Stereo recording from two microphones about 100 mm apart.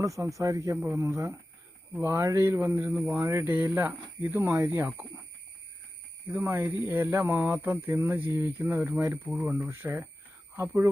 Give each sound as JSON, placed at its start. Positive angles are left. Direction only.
{"t": 0.0, "sound": "speech", "side_deg": -35}
{"t": 6.3, "sound": "speech", "side_deg": -25}